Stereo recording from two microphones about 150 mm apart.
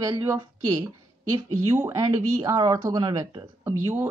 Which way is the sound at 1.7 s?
20° right (ahead or behind).